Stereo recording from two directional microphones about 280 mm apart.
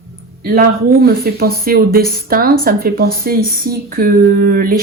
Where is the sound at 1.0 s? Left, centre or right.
Right.